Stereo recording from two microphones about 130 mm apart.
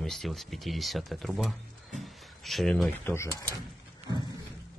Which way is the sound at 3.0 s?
15° left (ahead or behind).